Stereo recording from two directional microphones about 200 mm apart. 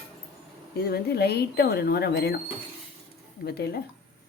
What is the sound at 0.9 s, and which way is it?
Speech, 55° left (ahead or behind).